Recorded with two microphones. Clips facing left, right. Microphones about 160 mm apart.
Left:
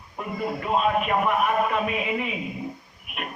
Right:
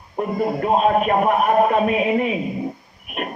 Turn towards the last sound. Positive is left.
turn(degrees=-45)  # may be behind; listen again after turning